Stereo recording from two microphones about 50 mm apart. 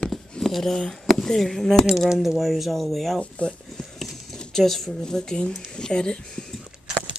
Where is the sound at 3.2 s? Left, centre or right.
Left.